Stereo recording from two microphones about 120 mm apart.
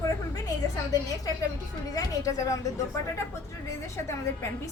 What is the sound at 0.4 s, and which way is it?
A woman's voice, 30° left (ahead or behind).